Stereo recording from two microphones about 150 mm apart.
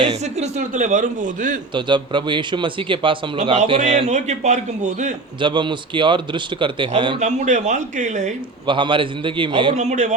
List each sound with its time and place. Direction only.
0.0 s a man's voice: 45° right (ahead or behind)
1.7 s a man's voice: 30° right (ahead or behind)
3.7 s a man's voice: 45° right (ahead or behind)
5.4 s a man's voice: 30° right (ahead or behind)
7.2 s a man's voice: 50° right (ahead or behind)
8.6 s a man's voice: 35° right (ahead or behind)
9.7 s a man's voice: 50° right (ahead or behind)